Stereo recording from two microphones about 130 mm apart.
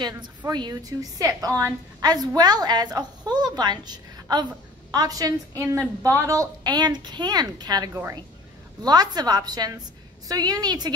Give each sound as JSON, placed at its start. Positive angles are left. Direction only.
{"t": 0.5, "sound": "a woman's voice", "side_deg": -30}
{"t": 7.9, "sound": "a woman's voice", "side_deg": -15}
{"t": 8.8, "sound": "a woman's voice", "side_deg": -30}